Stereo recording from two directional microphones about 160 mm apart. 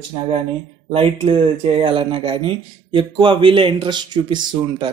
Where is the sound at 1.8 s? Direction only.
35° right (ahead or behind).